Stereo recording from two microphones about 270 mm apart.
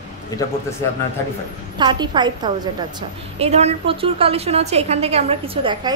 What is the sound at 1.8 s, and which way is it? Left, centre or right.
A woman's voice, centre.